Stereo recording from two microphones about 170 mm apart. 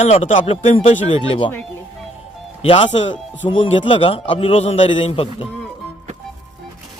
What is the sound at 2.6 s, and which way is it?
Speech, 35° left (ahead or behind).